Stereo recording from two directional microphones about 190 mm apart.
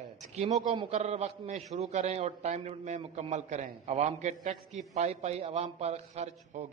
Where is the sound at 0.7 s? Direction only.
35° right (ahead or behind).